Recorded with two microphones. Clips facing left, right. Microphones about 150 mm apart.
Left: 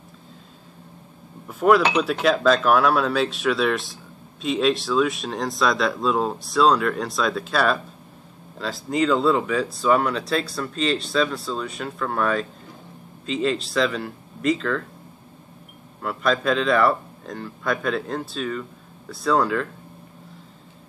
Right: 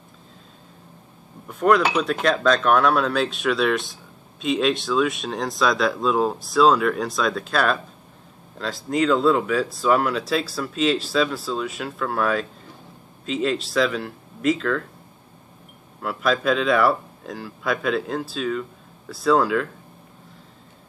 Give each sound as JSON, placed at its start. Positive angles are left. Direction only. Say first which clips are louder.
{"t": 1.5, "sound": "speech", "louder": "left 1 dB", "side_deg": 0}
{"t": 16.0, "sound": "speech", "louder": "even", "side_deg": 0}